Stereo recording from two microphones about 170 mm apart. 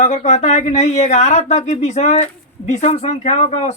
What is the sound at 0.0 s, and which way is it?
Speech, 40° left (ahead or behind).